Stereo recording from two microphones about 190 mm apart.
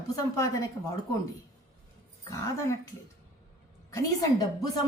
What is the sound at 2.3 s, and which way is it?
Speech, 15° left (ahead or behind).